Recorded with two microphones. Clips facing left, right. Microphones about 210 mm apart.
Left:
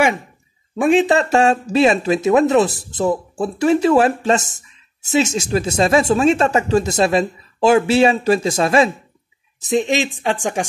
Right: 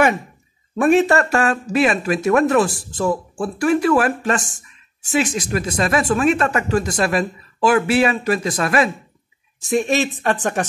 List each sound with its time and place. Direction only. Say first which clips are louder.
0.7 s speech: even; 15° left (ahead or behind)